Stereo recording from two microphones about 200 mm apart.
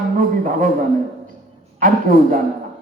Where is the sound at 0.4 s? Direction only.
40° right (ahead or behind).